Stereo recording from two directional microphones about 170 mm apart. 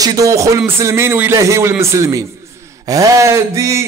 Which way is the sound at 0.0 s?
20° right (ahead or behind).